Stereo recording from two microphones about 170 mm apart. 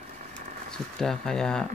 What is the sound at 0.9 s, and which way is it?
Speech, 5° left (ahead or behind).